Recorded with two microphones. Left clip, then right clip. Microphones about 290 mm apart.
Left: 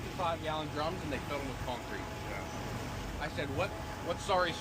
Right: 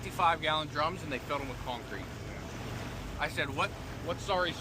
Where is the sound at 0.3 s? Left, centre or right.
Right.